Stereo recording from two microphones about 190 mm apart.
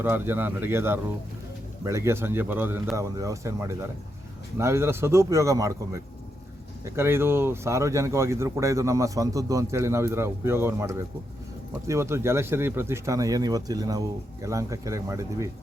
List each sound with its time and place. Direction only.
0.0 s speech: 10° right (ahead or behind)